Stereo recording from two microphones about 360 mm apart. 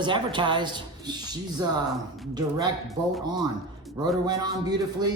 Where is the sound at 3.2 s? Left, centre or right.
Centre.